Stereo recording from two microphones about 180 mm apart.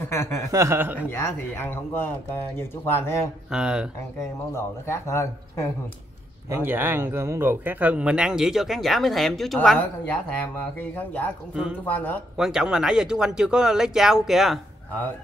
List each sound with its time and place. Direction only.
0.0 s speech: 15° left (ahead or behind)
0.5 s speech: 15° right (ahead or behind)
0.9 s speech: 10° left (ahead or behind)
3.4 s speech: 5° right (ahead or behind)
4.2 s speech: 15° left (ahead or behind)
6.5 s speech: 10° right (ahead or behind); by 12.2 s 10° left (ahead or behind)
12.4 s speech: 5° right (ahead or behind)